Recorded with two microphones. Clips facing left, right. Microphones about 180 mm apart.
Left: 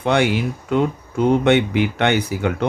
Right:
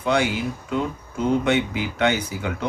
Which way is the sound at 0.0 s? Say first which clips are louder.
Left 4 dB; 65° left (ahead or behind).